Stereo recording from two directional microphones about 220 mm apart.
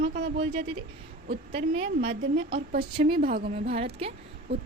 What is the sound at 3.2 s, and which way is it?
Speech, 40° right (ahead or behind).